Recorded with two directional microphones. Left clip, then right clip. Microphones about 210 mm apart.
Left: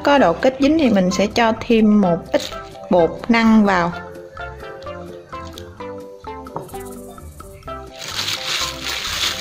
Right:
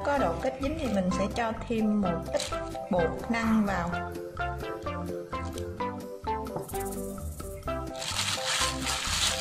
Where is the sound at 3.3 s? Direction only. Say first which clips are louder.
Left 13 dB; 40° left (ahead or behind).